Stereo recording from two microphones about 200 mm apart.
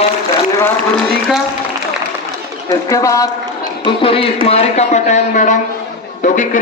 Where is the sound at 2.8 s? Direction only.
15° left (ahead or behind).